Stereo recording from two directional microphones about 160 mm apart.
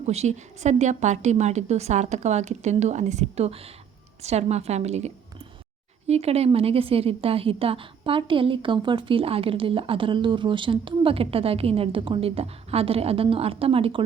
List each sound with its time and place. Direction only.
0.0 s a woman's voice: 45° right (ahead or behind)